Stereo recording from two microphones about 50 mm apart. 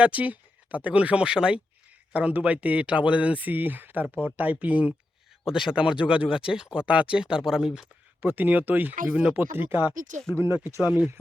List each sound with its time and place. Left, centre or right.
0.0 s speech: right
5.5 s speech: centre
5.7 s speech: centre
8.2 s speech: right
9.1 s speech: right
9.4 s speech: right
10.3 s speech: right